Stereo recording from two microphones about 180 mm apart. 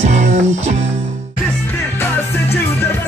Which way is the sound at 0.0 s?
40° right (ahead or behind).